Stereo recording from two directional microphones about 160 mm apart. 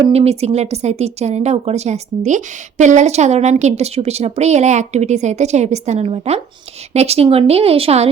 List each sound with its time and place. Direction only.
0.1 s speech: 40° right (ahead or behind)